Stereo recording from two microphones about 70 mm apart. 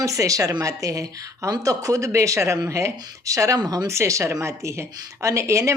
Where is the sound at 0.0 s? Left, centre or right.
Right.